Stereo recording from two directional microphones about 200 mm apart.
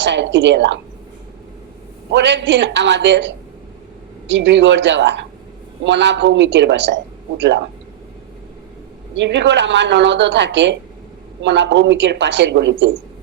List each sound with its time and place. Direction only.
0.0 s speech: 60° right (ahead or behind)
2.1 s speech: 60° right (ahead or behind)
9.1 s speech: 60° right (ahead or behind)